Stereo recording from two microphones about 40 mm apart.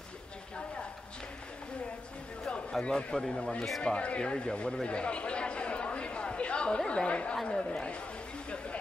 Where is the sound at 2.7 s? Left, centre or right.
Left.